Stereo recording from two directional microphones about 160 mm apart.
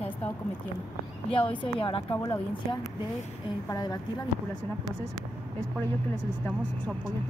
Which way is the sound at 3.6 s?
20° left (ahead or behind).